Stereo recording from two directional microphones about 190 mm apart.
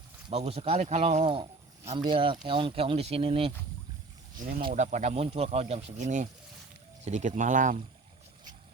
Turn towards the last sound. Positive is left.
turn(degrees=-40)  # may be behind; listen again after turning